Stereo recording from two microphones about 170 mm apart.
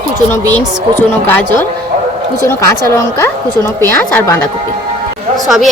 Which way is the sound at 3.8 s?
15° left (ahead or behind).